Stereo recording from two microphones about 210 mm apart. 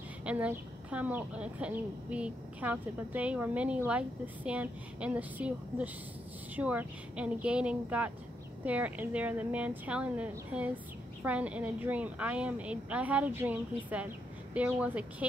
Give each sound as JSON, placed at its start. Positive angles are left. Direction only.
{"t": 0.2, "sound": "speech", "side_deg": -5}